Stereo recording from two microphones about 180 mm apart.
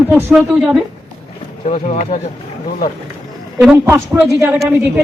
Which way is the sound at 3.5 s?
10° right (ahead or behind).